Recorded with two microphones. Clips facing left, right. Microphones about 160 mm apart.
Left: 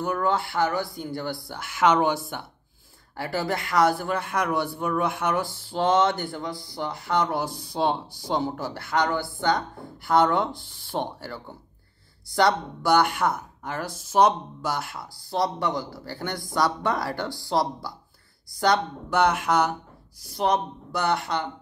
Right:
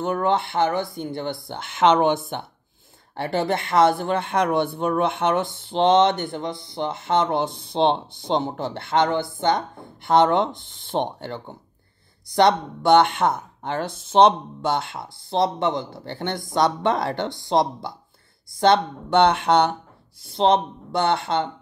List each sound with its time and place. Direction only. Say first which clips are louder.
0.0 s speech: right 3 dB; 25° right (ahead or behind)
3.2 s speech: right 4 dB; 25° right (ahead or behind)